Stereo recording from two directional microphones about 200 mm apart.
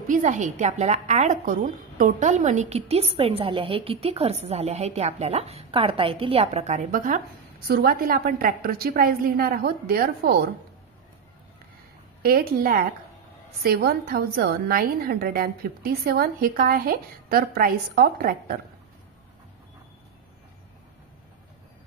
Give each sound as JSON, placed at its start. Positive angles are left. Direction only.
{"t": 0.1, "sound": "a woman's voice", "side_deg": -40}
{"t": 12.2, "sound": "a woman's voice", "side_deg": -45}